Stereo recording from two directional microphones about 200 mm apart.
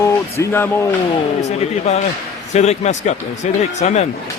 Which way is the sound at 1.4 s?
35° left (ahead or behind).